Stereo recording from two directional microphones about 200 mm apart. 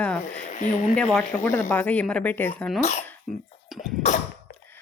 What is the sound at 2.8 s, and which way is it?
Speech, 35° left (ahead or behind).